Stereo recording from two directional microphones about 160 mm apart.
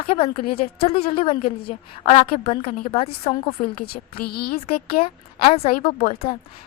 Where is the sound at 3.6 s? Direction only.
75° left (ahead or behind).